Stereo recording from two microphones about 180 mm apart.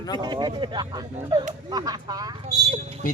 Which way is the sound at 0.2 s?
25° right (ahead or behind).